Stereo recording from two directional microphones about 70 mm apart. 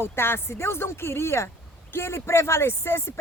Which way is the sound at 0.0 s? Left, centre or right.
Left.